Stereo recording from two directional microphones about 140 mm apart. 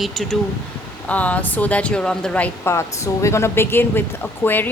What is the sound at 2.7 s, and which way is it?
A woman's voice, 20° left (ahead or behind).